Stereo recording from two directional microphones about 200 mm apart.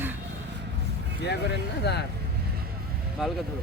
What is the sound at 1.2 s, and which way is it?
Speech, 55° left (ahead or behind).